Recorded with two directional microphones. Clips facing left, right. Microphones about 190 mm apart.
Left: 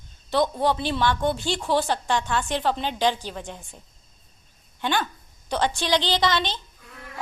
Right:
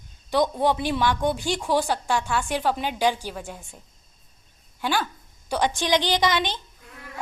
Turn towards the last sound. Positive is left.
turn(degrees=-15)  # may be behind; listen again after turning